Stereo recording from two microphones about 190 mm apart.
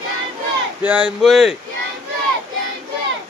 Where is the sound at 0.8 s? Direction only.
5° right (ahead or behind).